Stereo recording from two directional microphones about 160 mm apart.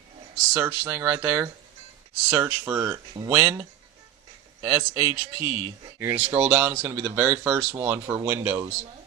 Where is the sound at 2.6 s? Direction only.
25° right (ahead or behind).